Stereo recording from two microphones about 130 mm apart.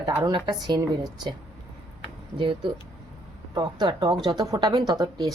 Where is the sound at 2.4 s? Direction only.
40° right (ahead or behind).